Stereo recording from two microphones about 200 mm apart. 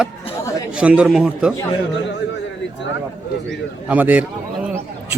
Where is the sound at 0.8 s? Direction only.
5° right (ahead or behind).